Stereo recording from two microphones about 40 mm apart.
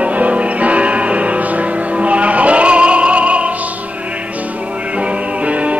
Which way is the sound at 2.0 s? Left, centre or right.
Right.